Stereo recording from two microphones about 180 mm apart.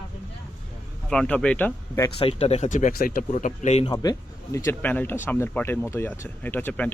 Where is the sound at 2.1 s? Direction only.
35° left (ahead or behind).